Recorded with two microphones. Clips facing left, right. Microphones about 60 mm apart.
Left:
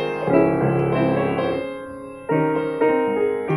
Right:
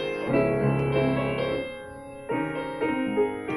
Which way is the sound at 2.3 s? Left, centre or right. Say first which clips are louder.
Left 9 dB; left.